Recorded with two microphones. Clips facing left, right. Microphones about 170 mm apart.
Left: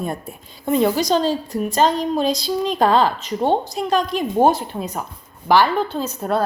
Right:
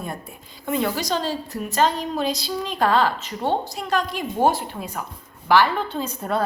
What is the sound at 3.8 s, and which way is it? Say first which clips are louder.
A woman's voice: left 5 dB; 30° left (ahead or behind).